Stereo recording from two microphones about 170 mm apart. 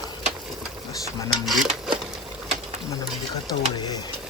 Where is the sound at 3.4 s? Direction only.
25° left (ahead or behind).